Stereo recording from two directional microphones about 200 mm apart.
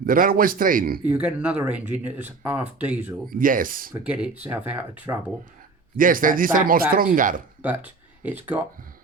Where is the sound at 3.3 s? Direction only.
45° right (ahead or behind).